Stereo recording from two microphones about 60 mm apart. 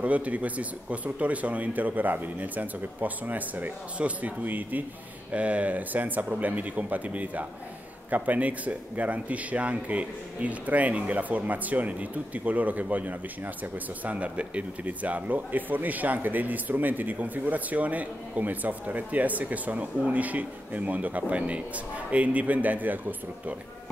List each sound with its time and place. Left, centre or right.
0.0 s speech: right